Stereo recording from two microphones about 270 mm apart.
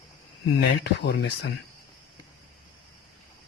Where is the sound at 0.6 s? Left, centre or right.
Left.